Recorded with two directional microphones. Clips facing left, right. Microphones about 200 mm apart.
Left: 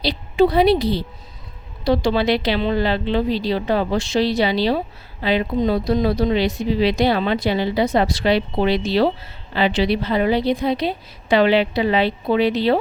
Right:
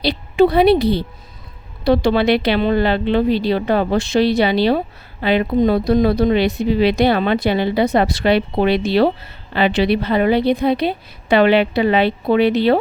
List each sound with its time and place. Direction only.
0.0 s a woman's voice: 60° right (ahead or behind)